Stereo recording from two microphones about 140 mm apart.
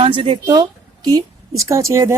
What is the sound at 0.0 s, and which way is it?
A woman's voice, 40° right (ahead or behind).